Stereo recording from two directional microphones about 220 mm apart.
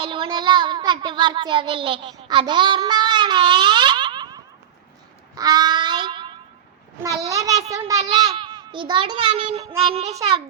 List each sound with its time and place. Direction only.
0.0 s child singing: 20° right (ahead or behind)
5.3 s a sound: 15° right (ahead or behind)
7.0 s a child's voice: 15° right (ahead or behind)